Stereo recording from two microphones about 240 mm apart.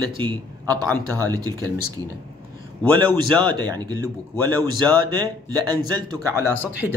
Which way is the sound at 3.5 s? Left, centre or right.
Centre.